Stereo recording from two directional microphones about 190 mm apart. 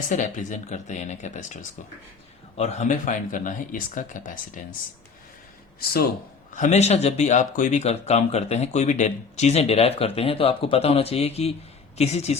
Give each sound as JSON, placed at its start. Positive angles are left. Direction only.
{"t": 0.1, "sound": "speech", "side_deg": 40}
{"t": 2.6, "sound": "speech", "side_deg": 35}
{"t": 6.5, "sound": "speech", "side_deg": 40}